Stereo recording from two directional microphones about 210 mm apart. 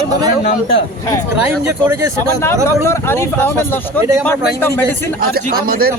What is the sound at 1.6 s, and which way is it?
Speech, 10° right (ahead or behind).